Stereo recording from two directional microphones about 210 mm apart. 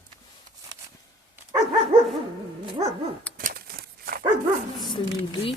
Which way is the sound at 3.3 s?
45° right (ahead or behind).